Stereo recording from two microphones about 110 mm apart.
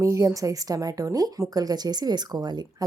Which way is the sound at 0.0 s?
30° right (ahead or behind).